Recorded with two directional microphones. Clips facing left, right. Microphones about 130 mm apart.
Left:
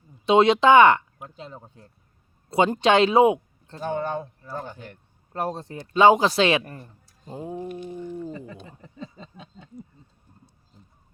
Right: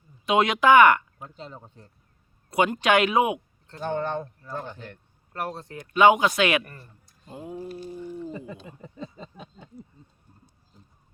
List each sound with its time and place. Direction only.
0.3 s speech: 30° left (ahead or behind)
1.2 s speech: 10° left (ahead or behind)
2.5 s speech: 30° left (ahead or behind)
3.8 s speech: 5° left (ahead or behind)
5.3 s speech: 25° left (ahead or behind)
7.7 s a sound: 35° right (ahead or behind)